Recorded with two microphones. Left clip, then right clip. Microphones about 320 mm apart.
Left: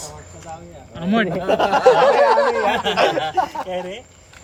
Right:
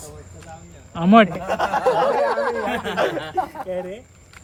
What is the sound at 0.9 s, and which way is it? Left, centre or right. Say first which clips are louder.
Speech: right 7 dB; centre.